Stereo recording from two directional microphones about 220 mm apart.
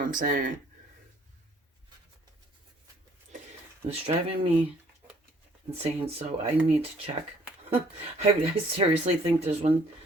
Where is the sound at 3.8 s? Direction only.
30° right (ahead or behind).